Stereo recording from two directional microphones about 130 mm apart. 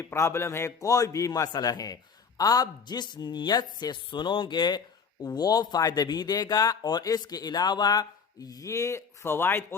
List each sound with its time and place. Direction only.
0.0 s a man's voice: 20° left (ahead or behind)